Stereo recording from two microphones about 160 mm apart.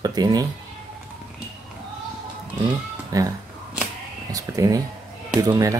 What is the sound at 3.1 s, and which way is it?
Speech, 20° right (ahead or behind).